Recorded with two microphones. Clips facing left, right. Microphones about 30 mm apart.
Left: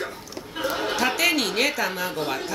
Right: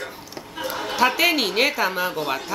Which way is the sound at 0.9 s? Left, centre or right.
Centre.